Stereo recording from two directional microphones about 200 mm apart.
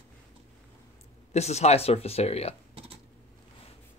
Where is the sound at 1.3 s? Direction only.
35° left (ahead or behind).